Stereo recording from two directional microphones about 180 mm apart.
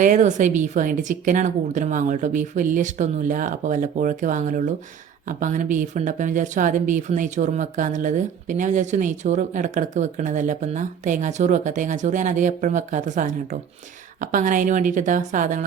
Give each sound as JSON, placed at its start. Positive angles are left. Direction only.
{"t": 0.0, "sound": "speech", "side_deg": -45}